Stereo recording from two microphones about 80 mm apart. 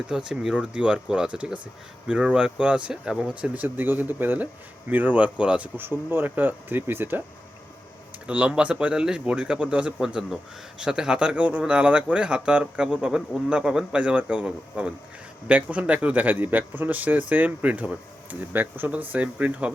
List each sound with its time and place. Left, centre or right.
0.1 s speech: centre
3.5 s speech: right
5.7 s speech: right
8.3 s speech: centre